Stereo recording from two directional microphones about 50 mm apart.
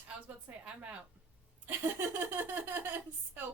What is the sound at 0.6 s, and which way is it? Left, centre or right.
Speech, right.